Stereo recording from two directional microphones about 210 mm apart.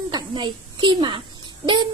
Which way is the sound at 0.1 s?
25° right (ahead or behind).